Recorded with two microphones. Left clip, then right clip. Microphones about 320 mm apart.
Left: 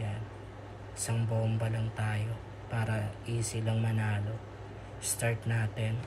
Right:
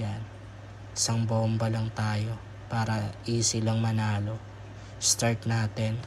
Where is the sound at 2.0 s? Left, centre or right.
Centre.